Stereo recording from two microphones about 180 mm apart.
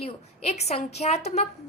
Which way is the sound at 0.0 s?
35° left (ahead or behind).